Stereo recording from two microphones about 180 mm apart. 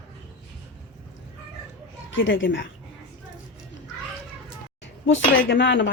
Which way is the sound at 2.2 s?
90° left.